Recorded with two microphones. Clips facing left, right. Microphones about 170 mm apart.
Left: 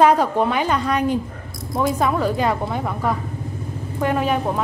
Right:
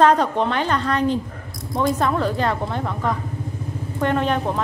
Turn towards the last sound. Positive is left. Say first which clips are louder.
# even
turn(degrees=5)  # may be behind; listen again after turning